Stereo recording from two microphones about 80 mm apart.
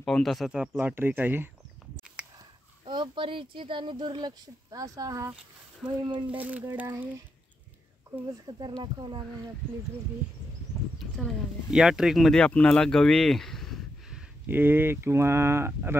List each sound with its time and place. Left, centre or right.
0.0 s speech: centre
0.7 s speech: right
2.2 s a sound: centre
2.9 s speech: right
4.6 s speech: right
5.9 s speech: right
6.2 s speech: centre
8.5 s speech: right
11.0 s a sound: centre
11.7 s speech: centre
12.3 s speech: centre
14.4 s speech: right